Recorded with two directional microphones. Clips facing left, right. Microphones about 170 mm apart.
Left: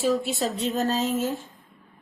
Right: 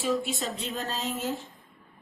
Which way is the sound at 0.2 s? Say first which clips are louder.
Left 5 dB; 40° left (ahead or behind).